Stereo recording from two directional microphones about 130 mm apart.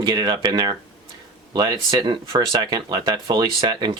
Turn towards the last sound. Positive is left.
turn(degrees=-35)  # may be behind; listen again after turning